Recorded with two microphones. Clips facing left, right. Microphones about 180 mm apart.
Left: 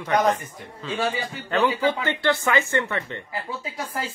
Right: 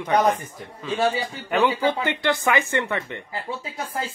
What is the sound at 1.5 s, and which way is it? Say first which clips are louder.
Speech: right 1 dB; 15° right (ahead or behind).